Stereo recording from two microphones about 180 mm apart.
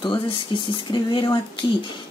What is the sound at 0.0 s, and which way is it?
Speech, 25° left (ahead or behind).